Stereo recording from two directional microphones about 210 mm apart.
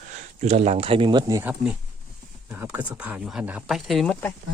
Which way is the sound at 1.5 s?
5° right (ahead or behind).